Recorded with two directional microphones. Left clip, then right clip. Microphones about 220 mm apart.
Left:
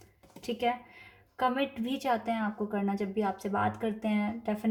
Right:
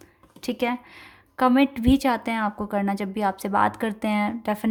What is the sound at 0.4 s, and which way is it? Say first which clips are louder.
Speech: right 4 dB; 50° right (ahead or behind).